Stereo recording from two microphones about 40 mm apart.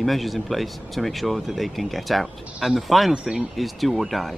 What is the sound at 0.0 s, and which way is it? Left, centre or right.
Speech, centre.